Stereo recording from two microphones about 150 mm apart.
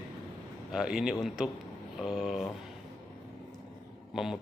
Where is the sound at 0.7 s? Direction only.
5° right (ahead or behind).